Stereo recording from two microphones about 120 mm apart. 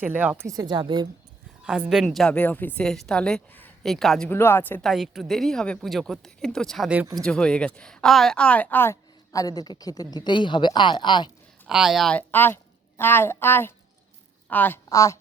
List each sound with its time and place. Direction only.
0.0 s speech: 15° right (ahead or behind)
0.4 s speech: 30° right (ahead or behind)
1.6 s a woman's voice: 5° right (ahead or behind)
4.3 s a woman's voice: 20° left (ahead or behind)
4.8 s a woman's voice: centre (ahead or behind); by 11.3 s 40° left (ahead or behind)
11.7 s speech: 5° right (ahead or behind)
12.1 s a woman's voice: 15° left (ahead or behind)
14.8 s speech: 25° left (ahead or behind)